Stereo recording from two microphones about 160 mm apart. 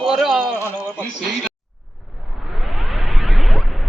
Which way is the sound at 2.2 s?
Centre (ahead or behind).